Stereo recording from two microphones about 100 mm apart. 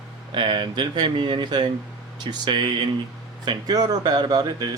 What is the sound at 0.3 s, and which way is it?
Speech, 50° right (ahead or behind).